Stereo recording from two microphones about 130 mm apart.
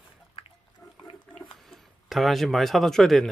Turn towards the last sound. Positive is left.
turn(degrees=0)  # may be behind; listen again after turning